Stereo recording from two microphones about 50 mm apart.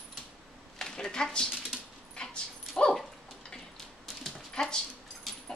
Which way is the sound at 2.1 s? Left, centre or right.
Centre.